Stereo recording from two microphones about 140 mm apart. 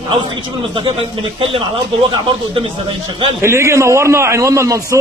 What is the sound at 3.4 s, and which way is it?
A man's voice, 20° right (ahead or behind).